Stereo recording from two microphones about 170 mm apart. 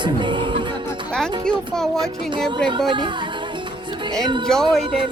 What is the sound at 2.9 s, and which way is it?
Speech, 30° right (ahead or behind).